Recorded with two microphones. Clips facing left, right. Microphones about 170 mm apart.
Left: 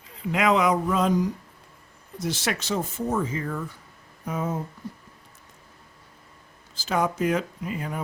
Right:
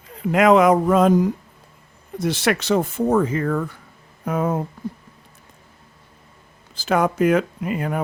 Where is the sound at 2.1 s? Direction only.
60° right (ahead or behind).